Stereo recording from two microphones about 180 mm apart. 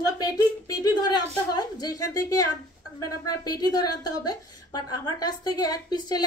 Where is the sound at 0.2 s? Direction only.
20° left (ahead or behind).